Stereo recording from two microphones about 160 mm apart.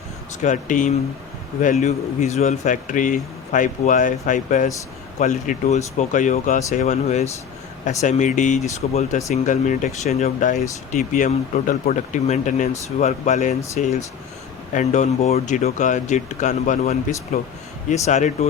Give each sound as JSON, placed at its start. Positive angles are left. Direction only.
{"t": 0.4, "sound": "speech", "side_deg": 50}